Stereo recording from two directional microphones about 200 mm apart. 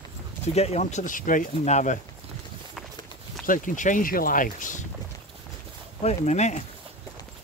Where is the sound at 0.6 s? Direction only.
35° left (ahead or behind).